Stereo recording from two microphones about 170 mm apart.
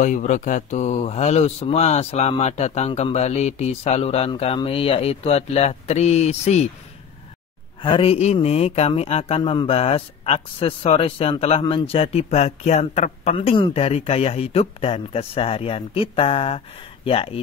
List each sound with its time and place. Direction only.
0.0 s speech: 50° left (ahead or behind)
7.8 s speech: 30° left (ahead or behind)